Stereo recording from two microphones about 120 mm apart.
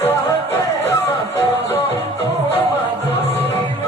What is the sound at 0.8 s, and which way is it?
Music, 20° left (ahead or behind).